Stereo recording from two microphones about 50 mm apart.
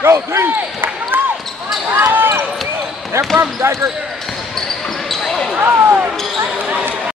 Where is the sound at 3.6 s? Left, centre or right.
Right.